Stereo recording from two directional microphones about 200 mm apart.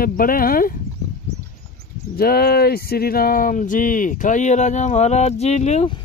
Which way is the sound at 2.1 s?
50° left (ahead or behind).